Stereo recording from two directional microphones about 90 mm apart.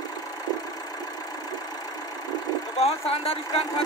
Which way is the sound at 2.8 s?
90° left.